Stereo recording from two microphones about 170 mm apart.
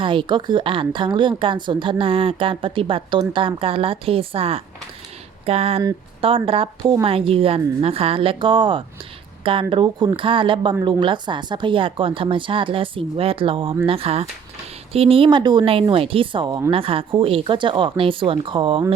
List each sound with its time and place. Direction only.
0.0 s a woman's voice: 30° right (ahead or behind)
16.7 s a woman's voice: 30° right (ahead or behind)